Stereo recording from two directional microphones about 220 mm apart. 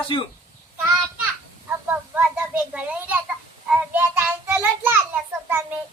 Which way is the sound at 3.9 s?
10° right (ahead or behind).